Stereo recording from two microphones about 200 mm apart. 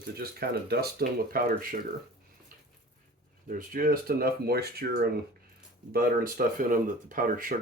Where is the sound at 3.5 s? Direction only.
45° right (ahead or behind).